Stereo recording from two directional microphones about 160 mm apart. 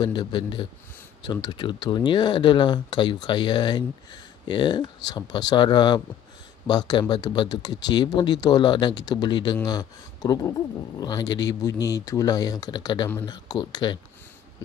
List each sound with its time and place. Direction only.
0.0 s speech: 25° left (ahead or behind)